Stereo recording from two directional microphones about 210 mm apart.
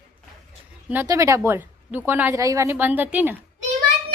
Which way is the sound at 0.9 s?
10° right (ahead or behind).